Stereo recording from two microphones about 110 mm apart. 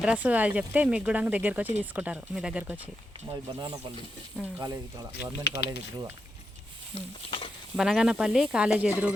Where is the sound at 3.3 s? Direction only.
40° right (ahead or behind).